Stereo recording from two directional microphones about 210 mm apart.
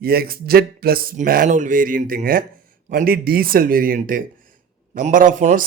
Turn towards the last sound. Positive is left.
turn(degrees=-35)  # may be behind; listen again after turning